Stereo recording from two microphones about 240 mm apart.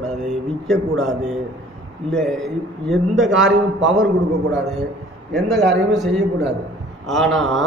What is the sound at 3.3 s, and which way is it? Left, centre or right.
Speech, right.